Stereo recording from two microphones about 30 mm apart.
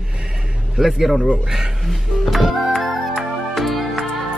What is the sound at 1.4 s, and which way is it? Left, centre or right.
Speech, centre.